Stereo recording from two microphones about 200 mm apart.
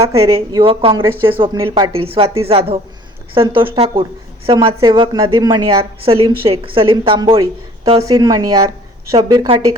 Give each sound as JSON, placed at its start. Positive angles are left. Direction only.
{"t": 0.0, "sound": "speech", "side_deg": -15}
{"t": 0.6, "sound": "a woman's voice", "side_deg": -30}